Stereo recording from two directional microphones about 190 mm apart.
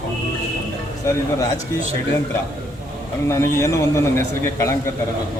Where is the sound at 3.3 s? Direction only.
15° left (ahead or behind).